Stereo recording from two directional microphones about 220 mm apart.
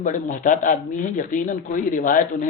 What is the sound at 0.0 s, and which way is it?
Speech, 35° left (ahead or behind).